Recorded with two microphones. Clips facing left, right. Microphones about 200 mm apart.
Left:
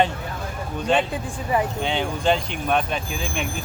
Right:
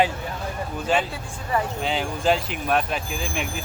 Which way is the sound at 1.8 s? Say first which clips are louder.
Left 1 dB; centre (ahead or behind).